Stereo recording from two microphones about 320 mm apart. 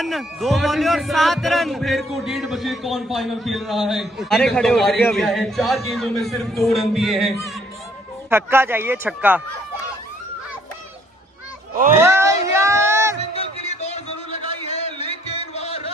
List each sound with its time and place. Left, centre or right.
0.0 s a man's voice: centre
12.0 s a sound: centre
13.3 s music: centre